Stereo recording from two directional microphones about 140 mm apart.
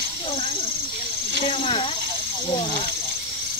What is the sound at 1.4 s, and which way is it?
Speech, 45° left (ahead or behind).